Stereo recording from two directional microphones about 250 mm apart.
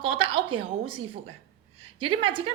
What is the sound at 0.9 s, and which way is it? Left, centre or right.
Speech, right.